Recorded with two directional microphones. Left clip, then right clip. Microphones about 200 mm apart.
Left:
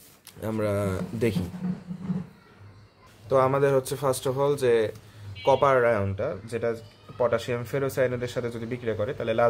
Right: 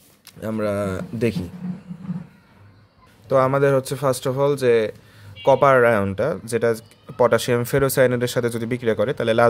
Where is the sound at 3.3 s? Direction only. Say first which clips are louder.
Right 4 dB; 35° right (ahead or behind).